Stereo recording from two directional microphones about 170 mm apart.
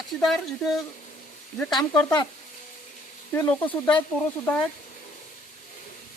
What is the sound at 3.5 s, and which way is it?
Speech, 15° left (ahead or behind).